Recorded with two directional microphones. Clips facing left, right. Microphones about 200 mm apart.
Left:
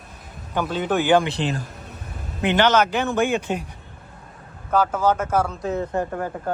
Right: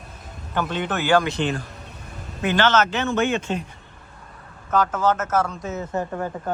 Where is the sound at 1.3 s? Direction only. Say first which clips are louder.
Right 1 dB; 35° left (ahead or behind).